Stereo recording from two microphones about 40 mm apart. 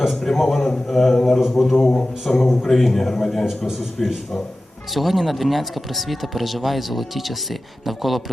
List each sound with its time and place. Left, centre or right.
0.1 s speech: centre
1.7 s a man's voice: centre
2.2 s a man's voice: centre
3.7 s a man's voice: centre